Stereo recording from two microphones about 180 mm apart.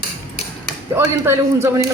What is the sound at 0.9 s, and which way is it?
Speech, 15° right (ahead or behind).